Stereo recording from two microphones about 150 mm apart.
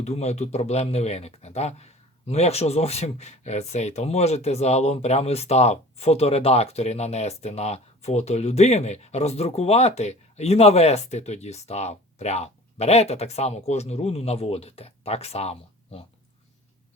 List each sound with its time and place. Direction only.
0.0 s speech: 45° left (ahead or behind)